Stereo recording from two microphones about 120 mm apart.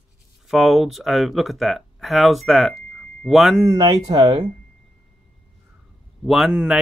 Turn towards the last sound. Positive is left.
turn(degrees=-5)  # may be behind; listen again after turning